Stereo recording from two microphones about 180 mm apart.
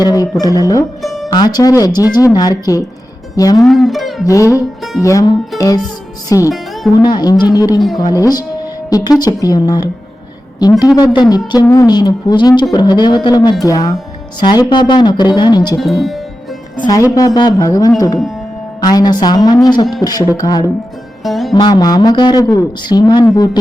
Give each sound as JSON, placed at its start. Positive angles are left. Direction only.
{"t": 0.0, "sound": "a woman's voice", "side_deg": 20}
{"t": 1.0, "sound": "music", "side_deg": 0}
{"t": 1.3, "sound": "a woman's voice", "side_deg": 20}
{"t": 3.6, "sound": "speech", "side_deg": 0}
{"t": 4.4, "sound": "music", "side_deg": -5}
{"t": 5.0, "sound": "a woman's voice", "side_deg": 20}
{"t": 5.5, "sound": "music", "side_deg": 20}
{"t": 6.2, "sound": "a woman's voice", "side_deg": 15}
{"t": 15.8, "sound": "speech", "side_deg": 0}
{"t": 17.2, "sound": "a woman's voice", "side_deg": 20}
{"t": 21.2, "sound": "speech", "side_deg": 0}
{"t": 21.5, "sound": "a woman's voice", "side_deg": 20}